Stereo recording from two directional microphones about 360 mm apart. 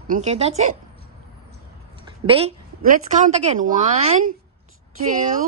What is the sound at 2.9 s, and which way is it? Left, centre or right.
A woman's voice, centre.